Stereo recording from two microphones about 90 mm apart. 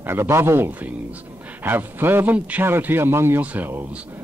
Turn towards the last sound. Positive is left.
turn(degrees=-15)  # may be behind; listen again after turning